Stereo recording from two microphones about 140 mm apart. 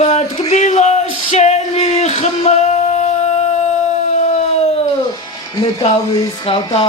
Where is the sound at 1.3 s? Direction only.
50° left (ahead or behind).